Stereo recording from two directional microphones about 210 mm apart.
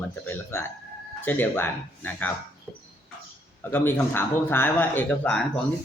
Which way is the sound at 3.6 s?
10° left (ahead or behind).